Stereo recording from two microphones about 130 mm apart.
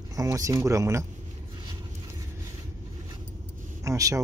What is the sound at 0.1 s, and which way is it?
Speech, 25° right (ahead or behind).